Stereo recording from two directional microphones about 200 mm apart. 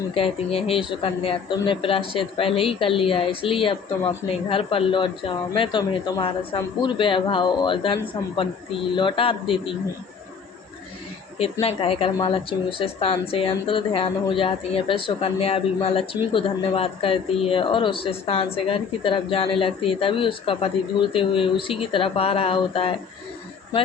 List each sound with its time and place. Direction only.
0.1 s a woman's voice: 25° left (ahead or behind)
9.0 s a woman's voice: 25° left (ahead or behind)
11.6 s a woman's voice: 30° left (ahead or behind)